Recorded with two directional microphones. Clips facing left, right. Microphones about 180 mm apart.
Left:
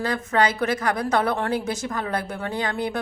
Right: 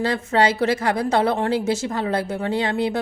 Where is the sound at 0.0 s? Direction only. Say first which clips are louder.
Right 3 dB; 30° right (ahead or behind).